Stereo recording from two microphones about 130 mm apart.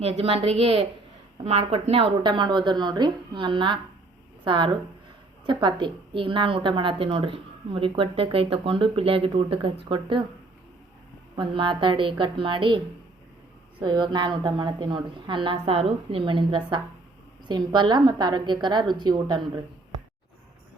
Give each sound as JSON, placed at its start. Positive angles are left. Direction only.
{"t": 0.0, "sound": "a woman's voice", "side_deg": -50}
{"t": 11.3, "sound": "a woman's voice", "side_deg": -40}
{"t": 13.8, "sound": "a woman's voice", "side_deg": -35}